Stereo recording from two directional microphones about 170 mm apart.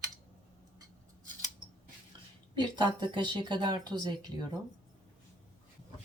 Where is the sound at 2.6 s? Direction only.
25° right (ahead or behind).